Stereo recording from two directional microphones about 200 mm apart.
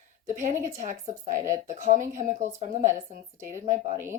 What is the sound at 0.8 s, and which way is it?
Speech, 40° right (ahead or behind).